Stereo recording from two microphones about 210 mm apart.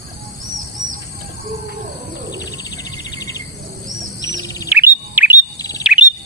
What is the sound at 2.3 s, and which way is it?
Bird, 15° left (ahead or behind).